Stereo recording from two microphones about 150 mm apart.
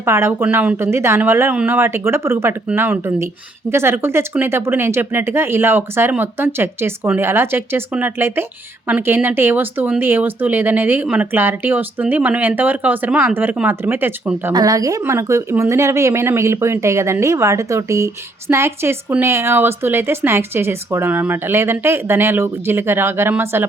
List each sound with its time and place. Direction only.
0.0 s speech: 15° right (ahead or behind)